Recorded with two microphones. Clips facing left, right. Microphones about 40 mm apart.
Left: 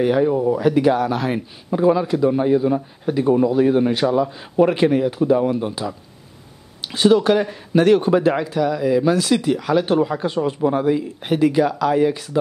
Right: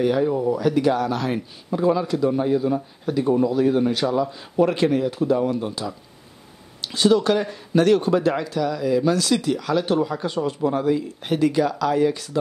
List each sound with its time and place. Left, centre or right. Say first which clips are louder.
0.0 s speech: left 3 dB; left